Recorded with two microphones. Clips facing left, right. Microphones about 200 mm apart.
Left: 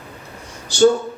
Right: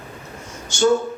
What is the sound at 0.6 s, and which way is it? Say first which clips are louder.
Speech: left 5 dB; 35° left (ahead or behind).